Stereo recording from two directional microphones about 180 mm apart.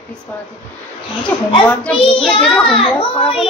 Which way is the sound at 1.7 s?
5° left (ahead or behind).